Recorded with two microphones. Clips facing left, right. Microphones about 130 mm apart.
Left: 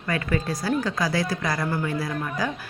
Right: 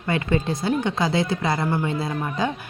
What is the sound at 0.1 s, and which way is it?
Speech, 25° right (ahead or behind).